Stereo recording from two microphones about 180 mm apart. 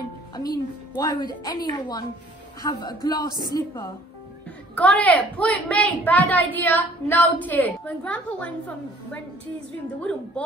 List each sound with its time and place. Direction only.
0.3 s a woman's voice: 20° left (ahead or behind)
4.7 s a woman's voice: 10° left (ahead or behind)